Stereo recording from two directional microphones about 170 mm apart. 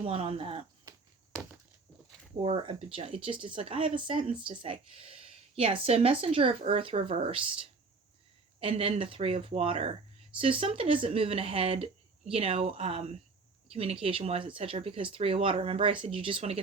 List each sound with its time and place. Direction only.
0.0 s speech: 35° right (ahead or behind)
2.4 s speech: 30° right (ahead or behind)
8.6 s speech: 35° right (ahead or behind)